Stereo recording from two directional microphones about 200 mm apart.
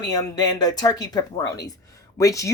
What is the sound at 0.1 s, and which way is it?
Speech, 20° left (ahead or behind).